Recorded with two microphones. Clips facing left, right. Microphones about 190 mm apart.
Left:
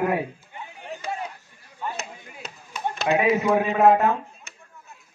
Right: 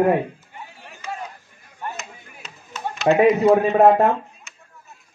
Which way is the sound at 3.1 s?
40° right (ahead or behind).